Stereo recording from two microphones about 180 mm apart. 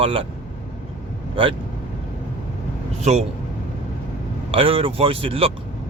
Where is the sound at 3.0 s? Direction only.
40° right (ahead or behind).